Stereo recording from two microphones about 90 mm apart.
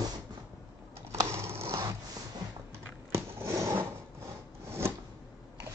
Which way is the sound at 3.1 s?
35° right (ahead or behind).